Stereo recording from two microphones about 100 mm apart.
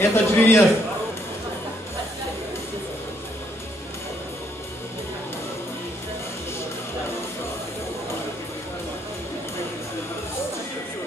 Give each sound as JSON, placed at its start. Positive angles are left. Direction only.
{"t": 0.0, "sound": "a man's voice", "side_deg": 25}